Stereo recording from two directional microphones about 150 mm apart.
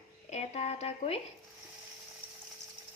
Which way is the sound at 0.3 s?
50° left (ahead or behind).